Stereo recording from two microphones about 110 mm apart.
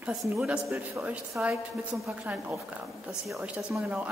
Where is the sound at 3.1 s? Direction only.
Centre (ahead or behind).